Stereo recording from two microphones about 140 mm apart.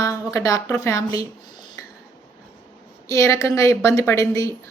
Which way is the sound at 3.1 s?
20° left (ahead or behind).